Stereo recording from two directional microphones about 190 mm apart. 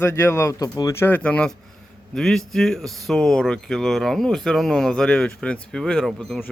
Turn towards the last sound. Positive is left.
turn(degrees=0)  # may be behind; listen again after turning